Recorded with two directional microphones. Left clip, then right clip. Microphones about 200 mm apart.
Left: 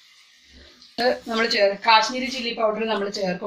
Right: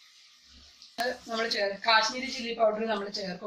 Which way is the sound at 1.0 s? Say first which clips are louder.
Left 9 dB; 40° left (ahead or behind).